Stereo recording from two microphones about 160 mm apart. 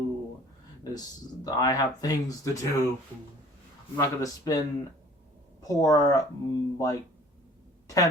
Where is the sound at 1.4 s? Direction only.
25° left (ahead or behind).